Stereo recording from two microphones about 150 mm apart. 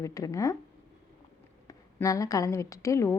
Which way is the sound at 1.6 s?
20° left (ahead or behind).